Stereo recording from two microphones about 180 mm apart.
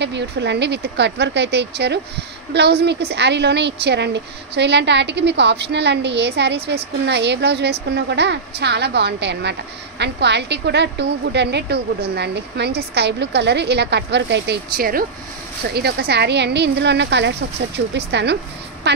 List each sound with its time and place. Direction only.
0.0 s a woman's voice: 75° right (ahead or behind)